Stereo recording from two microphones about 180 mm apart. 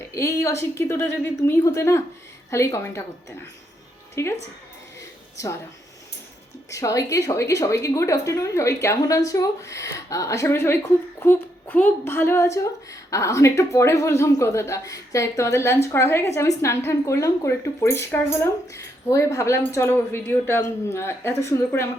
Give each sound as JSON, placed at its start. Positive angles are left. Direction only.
{"t": 0.1, "sound": "a woman's voice", "side_deg": 15}
{"t": 6.7, "sound": "a woman's voice", "side_deg": 15}